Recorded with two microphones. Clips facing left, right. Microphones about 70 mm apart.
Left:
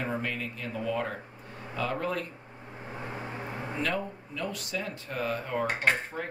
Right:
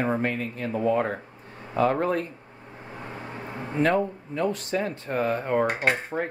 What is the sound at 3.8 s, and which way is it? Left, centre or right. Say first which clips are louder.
Speech: right 10 dB; right.